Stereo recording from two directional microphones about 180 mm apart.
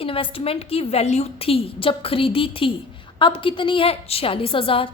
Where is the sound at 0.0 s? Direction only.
30° left (ahead or behind).